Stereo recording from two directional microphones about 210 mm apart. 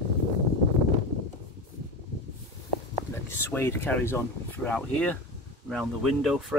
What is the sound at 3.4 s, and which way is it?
Speech, 10° left (ahead or behind).